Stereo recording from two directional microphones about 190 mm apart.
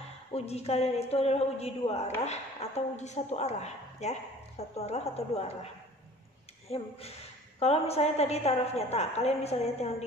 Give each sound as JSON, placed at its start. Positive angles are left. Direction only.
{"t": 0.3, "sound": "a woman's voice", "side_deg": 35}
{"t": 6.7, "sound": "a woman's voice", "side_deg": 30}